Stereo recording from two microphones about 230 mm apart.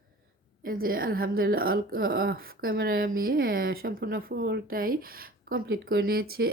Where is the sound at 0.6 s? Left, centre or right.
Right.